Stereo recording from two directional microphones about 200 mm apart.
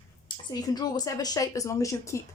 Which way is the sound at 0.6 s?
20° left (ahead or behind).